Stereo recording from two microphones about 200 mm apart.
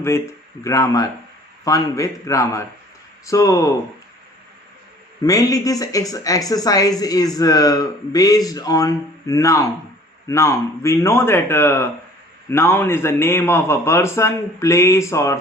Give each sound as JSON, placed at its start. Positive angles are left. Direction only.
{"t": 0.6, "sound": "speech", "side_deg": 15}
{"t": 5.2, "sound": "speech", "side_deg": 15}